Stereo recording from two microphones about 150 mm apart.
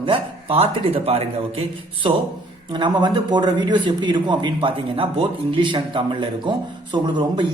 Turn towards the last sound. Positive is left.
turn(degrees=-30)  # may be behind; listen again after turning